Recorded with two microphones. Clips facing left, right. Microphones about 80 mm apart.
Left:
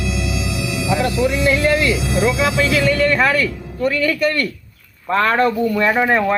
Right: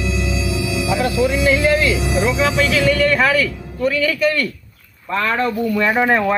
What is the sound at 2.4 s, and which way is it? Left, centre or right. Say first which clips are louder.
Speech: even; centre.